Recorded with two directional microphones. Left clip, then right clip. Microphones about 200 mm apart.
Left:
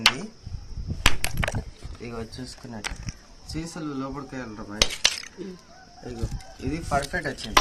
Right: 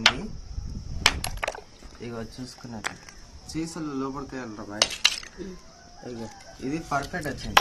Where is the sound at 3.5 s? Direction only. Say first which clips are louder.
Right 1 dB; 40° left (ahead or behind).